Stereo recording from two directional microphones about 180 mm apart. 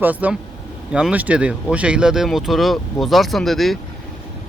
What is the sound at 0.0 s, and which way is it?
Speech, 10° right (ahead or behind).